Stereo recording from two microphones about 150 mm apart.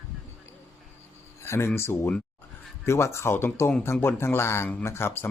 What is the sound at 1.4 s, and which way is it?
Speech, 15° left (ahead or behind).